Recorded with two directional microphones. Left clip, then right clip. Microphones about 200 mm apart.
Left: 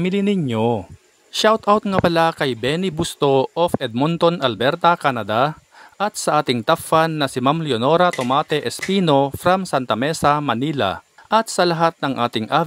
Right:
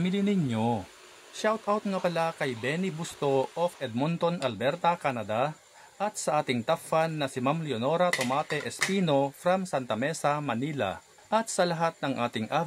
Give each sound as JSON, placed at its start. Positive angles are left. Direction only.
{"t": 0.0, "sound": "speech", "side_deg": 45}